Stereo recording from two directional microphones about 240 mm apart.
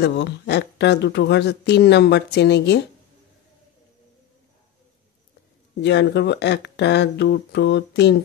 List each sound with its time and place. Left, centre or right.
0.0 s speech: left
5.8 s speech: left